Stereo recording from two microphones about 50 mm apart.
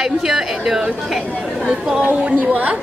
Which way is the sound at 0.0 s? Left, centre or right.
Centre.